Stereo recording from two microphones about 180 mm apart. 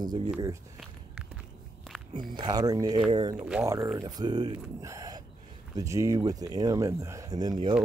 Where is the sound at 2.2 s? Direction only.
25° right (ahead or behind).